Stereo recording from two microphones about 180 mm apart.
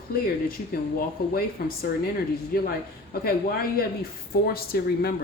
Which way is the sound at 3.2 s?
55° left (ahead or behind).